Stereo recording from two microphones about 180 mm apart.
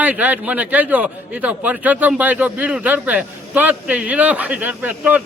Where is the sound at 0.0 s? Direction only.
10° right (ahead or behind).